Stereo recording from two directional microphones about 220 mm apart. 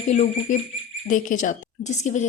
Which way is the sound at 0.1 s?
30° left (ahead or behind).